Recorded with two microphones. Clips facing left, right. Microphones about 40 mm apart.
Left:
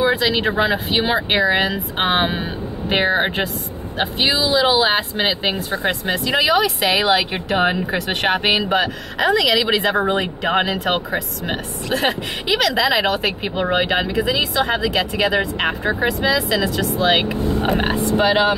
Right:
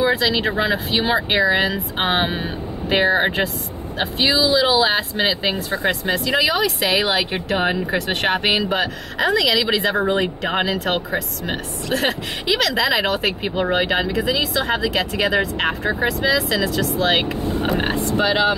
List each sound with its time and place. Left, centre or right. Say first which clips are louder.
0.0 s speech: left 1 dB; centre
5.8 s speech: even; centre